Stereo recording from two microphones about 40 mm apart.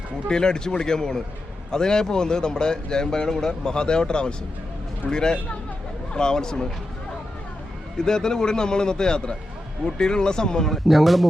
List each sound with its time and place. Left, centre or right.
0.3 s a man's voice: centre
7.9 s a man's voice: centre
10.8 s speech: centre